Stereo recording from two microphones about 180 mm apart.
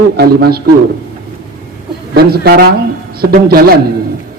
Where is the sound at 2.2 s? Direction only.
60° right (ahead or behind).